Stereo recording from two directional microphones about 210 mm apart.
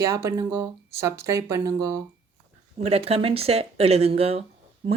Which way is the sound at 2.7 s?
30° right (ahead or behind).